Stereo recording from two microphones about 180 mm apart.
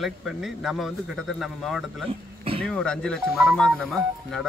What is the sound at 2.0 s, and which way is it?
Speech, 30° right (ahead or behind).